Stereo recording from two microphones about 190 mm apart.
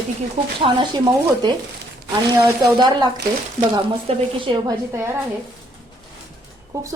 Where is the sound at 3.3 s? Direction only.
55° right (ahead or behind).